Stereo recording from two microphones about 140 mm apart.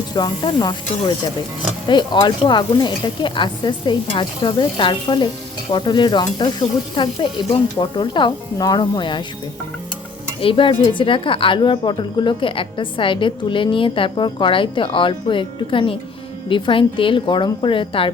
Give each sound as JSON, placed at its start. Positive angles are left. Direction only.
{"t": 0.1, "sound": "a woman's voice", "side_deg": 30}
{"t": 10.4, "sound": "a woman's voice", "side_deg": 40}